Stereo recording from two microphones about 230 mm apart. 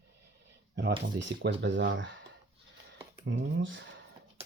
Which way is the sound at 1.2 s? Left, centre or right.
Right.